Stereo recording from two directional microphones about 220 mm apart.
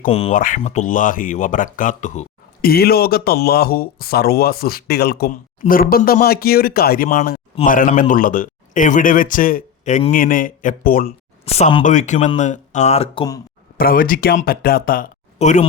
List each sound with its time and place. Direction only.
0.0 s speech: 30° left (ahead or behind)
11.4 s speech: 30° left (ahead or behind)
13.7 s speech: 40° left (ahead or behind)